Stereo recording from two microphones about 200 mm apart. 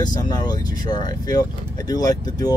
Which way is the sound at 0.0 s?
20° left (ahead or behind).